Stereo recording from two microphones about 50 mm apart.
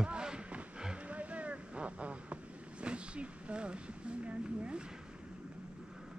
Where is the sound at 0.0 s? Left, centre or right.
Centre.